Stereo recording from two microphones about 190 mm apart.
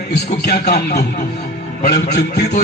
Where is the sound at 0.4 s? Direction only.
55° left (ahead or behind).